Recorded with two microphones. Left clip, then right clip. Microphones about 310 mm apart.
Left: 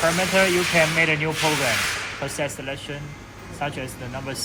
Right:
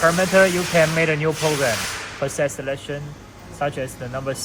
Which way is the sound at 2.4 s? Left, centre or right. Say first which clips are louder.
Right 7 dB; right.